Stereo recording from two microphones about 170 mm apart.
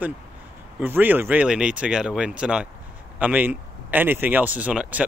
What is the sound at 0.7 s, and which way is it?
Speech, 10° right (ahead or behind).